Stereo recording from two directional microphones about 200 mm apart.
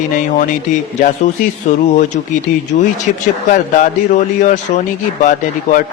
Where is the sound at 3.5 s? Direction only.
40° left (ahead or behind).